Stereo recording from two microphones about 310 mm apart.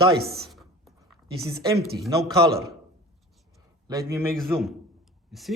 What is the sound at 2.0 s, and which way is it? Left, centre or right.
Speech, centre.